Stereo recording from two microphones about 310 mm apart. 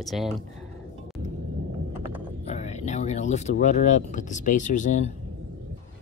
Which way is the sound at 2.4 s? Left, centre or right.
Left.